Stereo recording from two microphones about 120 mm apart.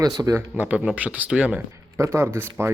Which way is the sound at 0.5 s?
15° right (ahead or behind).